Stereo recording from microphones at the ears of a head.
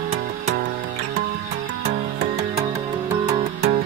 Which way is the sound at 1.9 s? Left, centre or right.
Right.